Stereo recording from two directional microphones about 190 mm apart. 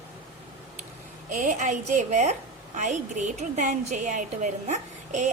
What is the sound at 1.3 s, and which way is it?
A woman's voice, 40° right (ahead or behind).